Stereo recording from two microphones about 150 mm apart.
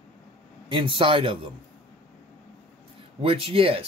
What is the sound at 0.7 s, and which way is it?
Speech, 35° right (ahead or behind).